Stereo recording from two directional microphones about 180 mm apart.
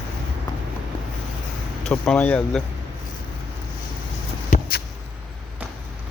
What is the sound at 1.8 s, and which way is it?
Speech, 5° left (ahead or behind).